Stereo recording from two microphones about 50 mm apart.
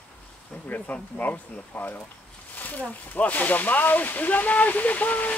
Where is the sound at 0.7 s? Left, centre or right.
Left.